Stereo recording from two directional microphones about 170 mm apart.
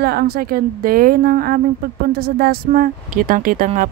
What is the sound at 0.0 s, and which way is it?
Speech, 65° right (ahead or behind).